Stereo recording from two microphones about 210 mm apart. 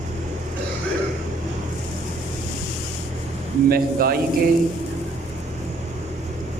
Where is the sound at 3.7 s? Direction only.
45° right (ahead or behind).